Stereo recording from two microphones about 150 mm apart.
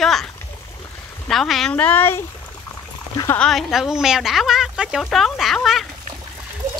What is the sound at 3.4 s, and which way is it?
Speech, centre (ahead or behind).